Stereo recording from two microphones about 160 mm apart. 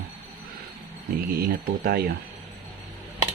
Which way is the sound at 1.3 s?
70° right (ahead or behind).